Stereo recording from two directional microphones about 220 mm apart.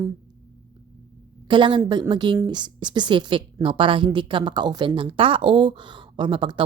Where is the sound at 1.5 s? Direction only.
20° right (ahead or behind).